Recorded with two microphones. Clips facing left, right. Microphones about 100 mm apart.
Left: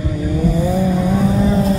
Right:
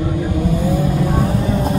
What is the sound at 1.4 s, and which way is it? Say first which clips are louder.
Vehicle: left 4 dB; 30° left (ahead or behind).